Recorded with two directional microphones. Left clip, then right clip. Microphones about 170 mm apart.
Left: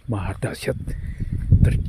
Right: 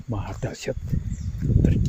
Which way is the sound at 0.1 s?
40° left (ahead or behind).